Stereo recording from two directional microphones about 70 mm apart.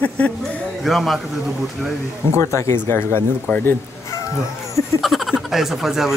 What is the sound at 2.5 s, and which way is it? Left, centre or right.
Speech, left.